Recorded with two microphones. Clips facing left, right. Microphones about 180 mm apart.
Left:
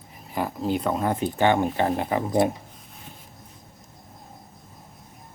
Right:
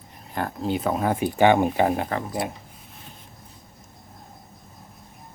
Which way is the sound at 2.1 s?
15° left (ahead or behind).